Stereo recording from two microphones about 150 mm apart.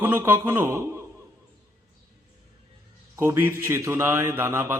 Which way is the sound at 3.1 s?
15° right (ahead or behind).